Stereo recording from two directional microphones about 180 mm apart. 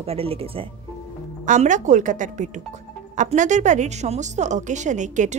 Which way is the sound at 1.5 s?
45° right (ahead or behind).